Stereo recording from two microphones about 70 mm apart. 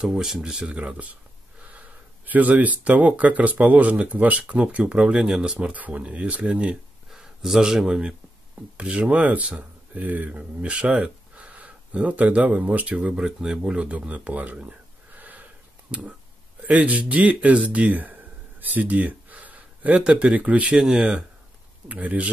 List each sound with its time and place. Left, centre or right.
0.0 s speech: centre
7.1 s speech: centre